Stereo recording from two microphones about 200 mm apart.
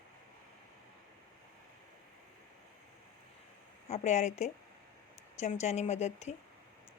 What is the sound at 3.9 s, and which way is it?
Speech, 35° left (ahead or behind).